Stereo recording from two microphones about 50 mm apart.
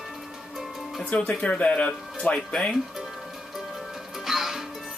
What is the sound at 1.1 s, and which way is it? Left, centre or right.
Speech, left.